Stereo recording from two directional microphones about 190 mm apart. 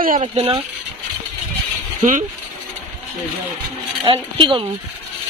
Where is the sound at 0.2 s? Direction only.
30° right (ahead or behind).